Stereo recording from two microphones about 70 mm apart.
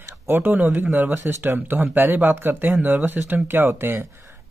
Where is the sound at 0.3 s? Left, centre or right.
Right.